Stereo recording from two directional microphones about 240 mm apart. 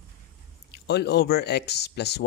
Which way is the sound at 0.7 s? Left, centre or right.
Left.